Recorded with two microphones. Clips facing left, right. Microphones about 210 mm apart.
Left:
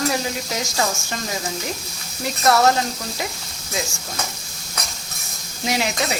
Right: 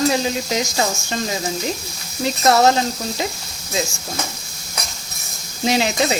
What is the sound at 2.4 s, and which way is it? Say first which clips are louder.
Stir: right 2 dB; 25° right (ahead or behind).